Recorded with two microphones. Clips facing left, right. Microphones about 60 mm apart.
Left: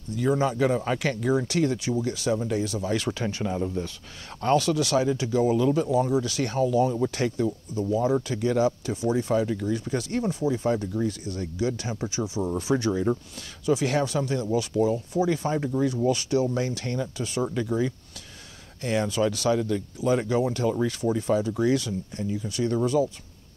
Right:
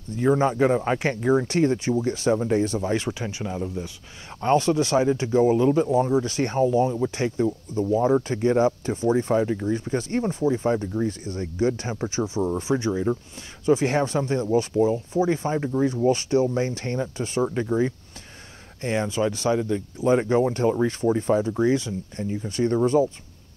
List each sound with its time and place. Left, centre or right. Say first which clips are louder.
0.1 s speech: right 3 dB; right
3.2 s speech: left 2 dB; centre
4.4 s speech: right 2 dB; right